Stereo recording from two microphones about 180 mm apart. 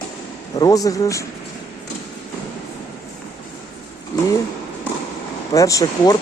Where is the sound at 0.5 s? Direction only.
20° left (ahead or behind).